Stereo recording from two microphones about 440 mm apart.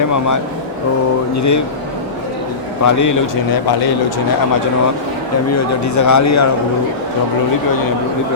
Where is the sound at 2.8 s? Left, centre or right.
Left.